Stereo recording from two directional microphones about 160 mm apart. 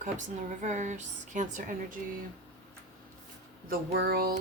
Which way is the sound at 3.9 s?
75° right (ahead or behind).